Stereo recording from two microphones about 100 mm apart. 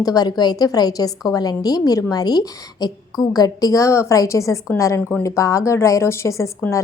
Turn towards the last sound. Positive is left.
turn(degrees=30)  # may be behind; listen again after turning